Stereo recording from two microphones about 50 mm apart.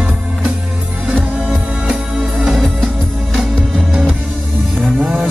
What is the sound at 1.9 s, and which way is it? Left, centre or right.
Music, centre.